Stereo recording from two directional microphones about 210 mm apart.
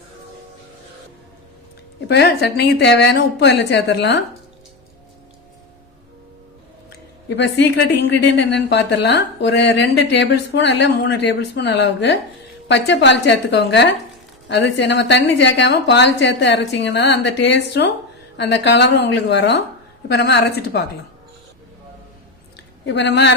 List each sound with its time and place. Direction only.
2.0 s a woman's voice: 50° left (ahead or behind)
7.3 s a woman's voice: 55° left (ahead or behind)
22.9 s a woman's voice: 55° left (ahead or behind)